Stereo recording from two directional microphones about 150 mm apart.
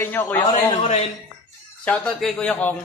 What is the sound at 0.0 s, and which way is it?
Speech, 15° left (ahead or behind).